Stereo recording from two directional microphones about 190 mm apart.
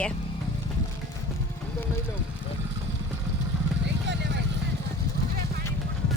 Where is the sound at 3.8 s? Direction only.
65° right (ahead or behind).